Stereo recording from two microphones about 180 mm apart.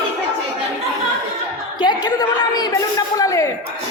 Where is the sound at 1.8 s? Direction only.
25° left (ahead or behind).